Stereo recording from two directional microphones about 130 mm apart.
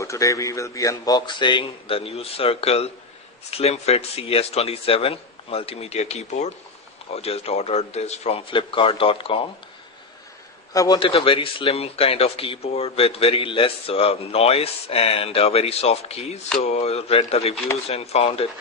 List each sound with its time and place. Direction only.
0.0 s a man's voice: 25° left (ahead or behind); by 9.4 s 45° left (ahead or behind)
10.7 s a man's voice: 25° left (ahead or behind)
11.0 s a man's voice: 45° left (ahead or behind)